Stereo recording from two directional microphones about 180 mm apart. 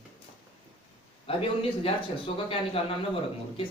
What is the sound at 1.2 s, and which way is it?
A woman's voice, 30° left (ahead or behind).